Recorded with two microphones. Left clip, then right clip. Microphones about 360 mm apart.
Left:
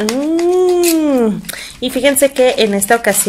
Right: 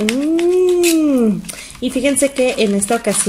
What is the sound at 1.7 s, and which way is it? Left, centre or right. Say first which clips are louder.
Speech: left 4 dB; left.